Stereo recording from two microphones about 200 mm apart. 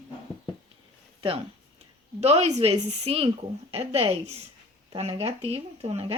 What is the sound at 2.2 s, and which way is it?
Speech, 30° right (ahead or behind).